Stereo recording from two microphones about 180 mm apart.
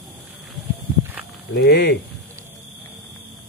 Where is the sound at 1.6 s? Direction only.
70° left (ahead or behind).